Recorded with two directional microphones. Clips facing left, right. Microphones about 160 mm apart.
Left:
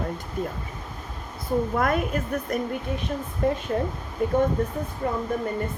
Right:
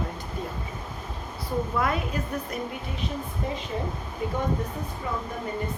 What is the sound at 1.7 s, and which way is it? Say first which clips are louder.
A woman's voice: left 3 dB; 50° left (ahead or behind).